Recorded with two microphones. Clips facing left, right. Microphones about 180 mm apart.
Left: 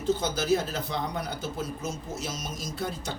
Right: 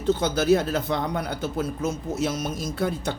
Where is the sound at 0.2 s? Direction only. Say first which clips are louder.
Right 6 dB; 60° right (ahead or behind).